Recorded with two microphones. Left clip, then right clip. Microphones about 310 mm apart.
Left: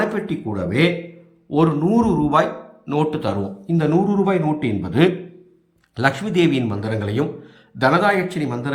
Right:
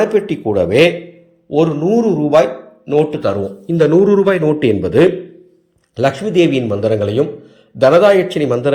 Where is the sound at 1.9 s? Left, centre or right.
Centre.